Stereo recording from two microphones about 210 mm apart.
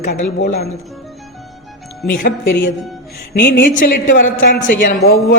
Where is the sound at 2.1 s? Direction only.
45° left (ahead or behind).